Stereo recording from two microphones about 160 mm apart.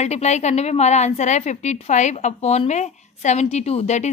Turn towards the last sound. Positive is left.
turn(degrees=45)  # may be behind; listen again after turning